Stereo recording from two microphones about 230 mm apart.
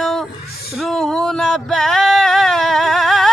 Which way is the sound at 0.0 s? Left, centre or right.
Centre.